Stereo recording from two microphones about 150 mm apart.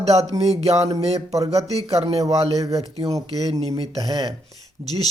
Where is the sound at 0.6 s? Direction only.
45° right (ahead or behind).